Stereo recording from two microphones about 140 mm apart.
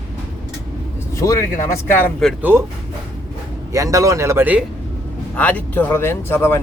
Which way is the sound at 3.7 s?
25° right (ahead or behind).